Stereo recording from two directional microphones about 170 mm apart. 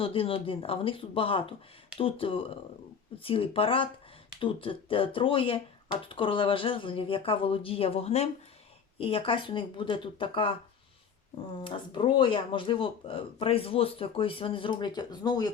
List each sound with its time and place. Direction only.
0.0 s speech: 35° left (ahead or behind)
11.6 s speech: 30° left (ahead or behind)